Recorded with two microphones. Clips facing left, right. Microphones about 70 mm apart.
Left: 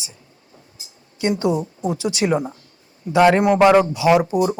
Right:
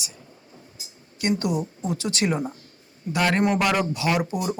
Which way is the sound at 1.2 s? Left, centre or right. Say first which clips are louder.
Left 5 dB; left.